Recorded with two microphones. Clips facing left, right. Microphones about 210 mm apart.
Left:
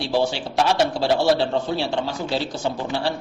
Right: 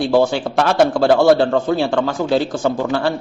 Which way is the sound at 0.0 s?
50° right (ahead or behind).